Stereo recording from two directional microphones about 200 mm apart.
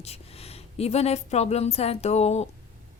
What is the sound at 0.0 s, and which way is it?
A woman's voice, 30° left (ahead or behind).